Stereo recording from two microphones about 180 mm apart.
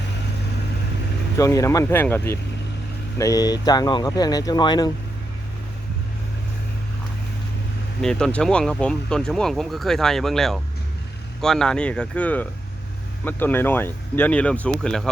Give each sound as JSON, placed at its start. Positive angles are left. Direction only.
{"t": 1.4, "sound": "speech", "side_deg": 15}
{"t": 8.0, "sound": "speech", "side_deg": 5}